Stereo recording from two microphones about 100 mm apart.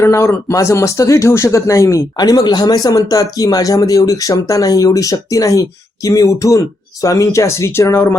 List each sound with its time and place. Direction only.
0.0 s speech: 25° left (ahead or behind)